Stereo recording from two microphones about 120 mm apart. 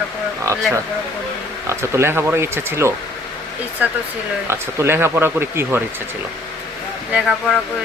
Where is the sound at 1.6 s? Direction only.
25° right (ahead or behind).